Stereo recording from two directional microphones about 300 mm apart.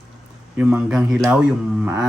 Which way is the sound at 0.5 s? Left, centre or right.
Centre.